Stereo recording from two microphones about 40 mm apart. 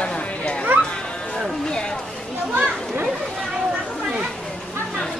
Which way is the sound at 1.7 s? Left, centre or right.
Left.